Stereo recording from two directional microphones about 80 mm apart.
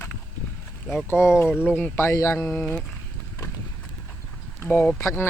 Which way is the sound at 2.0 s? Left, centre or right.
Left.